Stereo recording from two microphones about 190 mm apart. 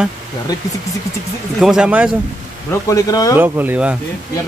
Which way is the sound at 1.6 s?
5° right (ahead or behind).